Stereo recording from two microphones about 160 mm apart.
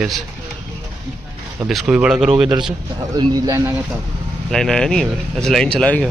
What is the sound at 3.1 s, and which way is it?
Speech, 25° right (ahead or behind).